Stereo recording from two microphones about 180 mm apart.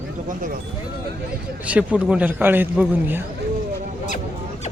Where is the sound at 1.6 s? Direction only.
5° right (ahead or behind).